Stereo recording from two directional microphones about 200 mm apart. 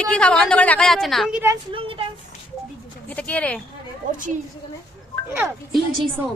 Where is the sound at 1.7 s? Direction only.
25° right (ahead or behind).